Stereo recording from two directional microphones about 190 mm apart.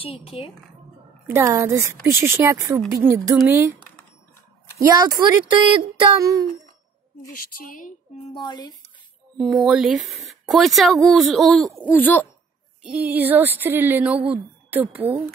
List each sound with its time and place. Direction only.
0.0 s speech: 30° left (ahead or behind)
1.3 s speech: 15° right (ahead or behind)
4.7 s speech: 20° right (ahead or behind)
7.3 s a woman's voice: 50° left (ahead or behind)
8.4 s speech: 20° left (ahead or behind)
9.4 s speech: centre (ahead or behind)
12.8 s speech: 10° right (ahead or behind)